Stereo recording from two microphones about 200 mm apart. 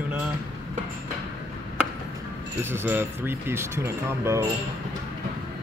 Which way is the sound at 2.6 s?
10° right (ahead or behind).